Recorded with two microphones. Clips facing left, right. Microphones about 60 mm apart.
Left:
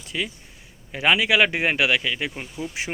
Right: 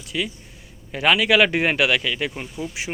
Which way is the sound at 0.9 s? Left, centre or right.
Left.